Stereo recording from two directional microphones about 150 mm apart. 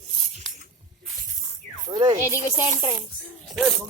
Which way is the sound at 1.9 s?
30° right (ahead or behind).